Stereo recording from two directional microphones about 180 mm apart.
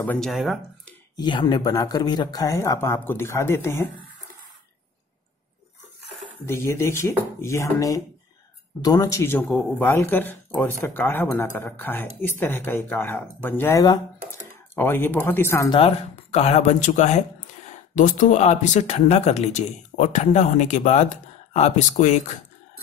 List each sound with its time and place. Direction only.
0.0 s speech: 5° left (ahead or behind)
1.1 s speech: 25° left (ahead or behind)
6.4 s speech: 15° left (ahead or behind)
15.7 s speech: 35° left (ahead or behind)